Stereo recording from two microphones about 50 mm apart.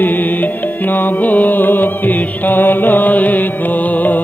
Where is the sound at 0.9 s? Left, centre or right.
Left.